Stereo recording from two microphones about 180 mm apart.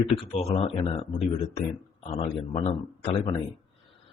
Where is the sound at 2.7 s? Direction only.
25° left (ahead or behind).